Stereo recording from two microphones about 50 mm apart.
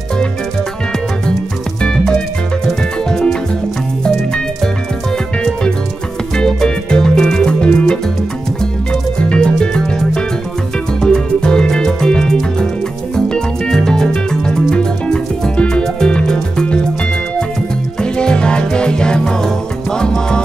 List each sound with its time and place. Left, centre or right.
1.8 s music: centre
6.3 s music: centre
9.3 s music: centre
18.0 s music: centre